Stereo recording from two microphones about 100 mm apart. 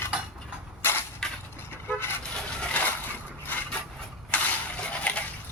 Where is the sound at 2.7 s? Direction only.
15° left (ahead or behind).